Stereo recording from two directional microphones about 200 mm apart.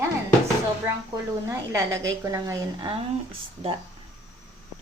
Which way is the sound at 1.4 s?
15° right (ahead or behind).